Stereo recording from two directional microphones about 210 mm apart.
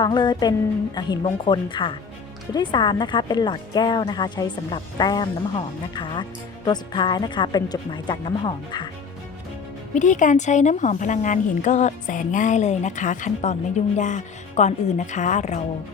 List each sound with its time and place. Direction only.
0.0 s speech: 20° left (ahead or behind)
9.9 s a woman's voice: 35° left (ahead or behind)